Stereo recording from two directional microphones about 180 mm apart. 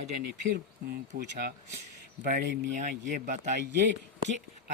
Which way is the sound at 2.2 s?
45° right (ahead or behind).